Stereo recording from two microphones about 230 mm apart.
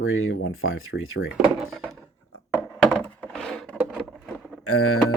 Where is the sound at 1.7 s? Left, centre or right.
Centre.